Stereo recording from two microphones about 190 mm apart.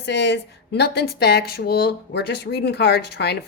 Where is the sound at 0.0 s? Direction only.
65° left (ahead or behind).